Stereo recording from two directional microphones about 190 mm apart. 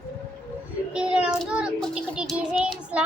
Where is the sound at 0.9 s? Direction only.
5° right (ahead or behind).